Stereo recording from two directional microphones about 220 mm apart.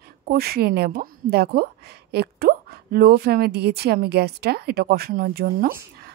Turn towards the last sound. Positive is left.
turn(degrees=-45)  # may be behind; listen again after turning